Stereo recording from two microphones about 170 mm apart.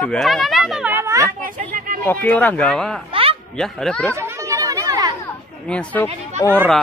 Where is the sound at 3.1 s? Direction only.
30° right (ahead or behind).